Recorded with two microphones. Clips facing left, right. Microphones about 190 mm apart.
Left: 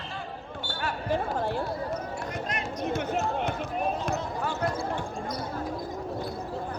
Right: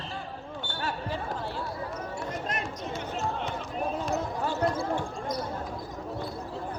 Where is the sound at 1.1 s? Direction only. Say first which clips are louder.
Left 6 dB; 50° left (ahead or behind).